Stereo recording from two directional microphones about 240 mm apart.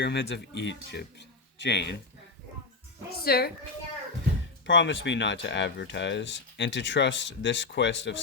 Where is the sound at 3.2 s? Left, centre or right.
Left.